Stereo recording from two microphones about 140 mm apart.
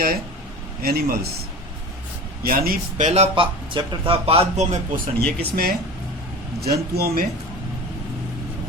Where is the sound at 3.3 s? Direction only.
35° right (ahead or behind); by 5.0 s 55° right (ahead or behind).